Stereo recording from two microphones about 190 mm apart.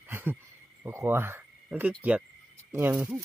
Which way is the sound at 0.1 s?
10° right (ahead or behind).